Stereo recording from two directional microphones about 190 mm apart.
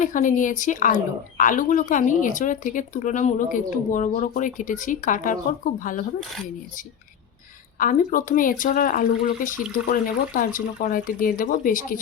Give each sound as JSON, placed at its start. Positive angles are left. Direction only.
{"t": 0.0, "sound": "a woman's voice", "side_deg": 45}
{"t": 7.8, "sound": "a woman's voice", "side_deg": 45}